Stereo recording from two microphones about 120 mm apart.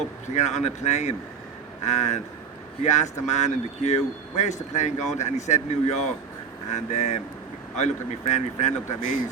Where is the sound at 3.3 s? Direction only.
70° left (ahead or behind).